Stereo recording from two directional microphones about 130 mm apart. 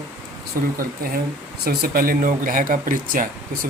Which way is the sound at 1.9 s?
90° right.